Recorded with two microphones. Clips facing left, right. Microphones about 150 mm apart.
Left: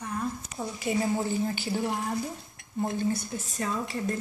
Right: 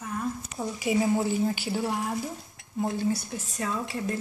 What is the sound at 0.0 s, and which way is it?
Speech, 5° right (ahead or behind).